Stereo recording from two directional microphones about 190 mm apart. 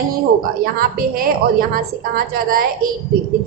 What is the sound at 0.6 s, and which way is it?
Speech, 50° right (ahead or behind).